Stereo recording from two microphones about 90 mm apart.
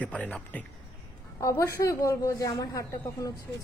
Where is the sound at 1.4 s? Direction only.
40° left (ahead or behind).